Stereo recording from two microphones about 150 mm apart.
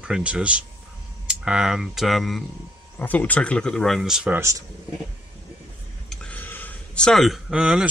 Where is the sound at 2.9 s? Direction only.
10° left (ahead or behind).